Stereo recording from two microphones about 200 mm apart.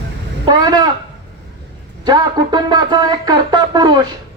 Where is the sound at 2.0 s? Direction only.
20° right (ahead or behind).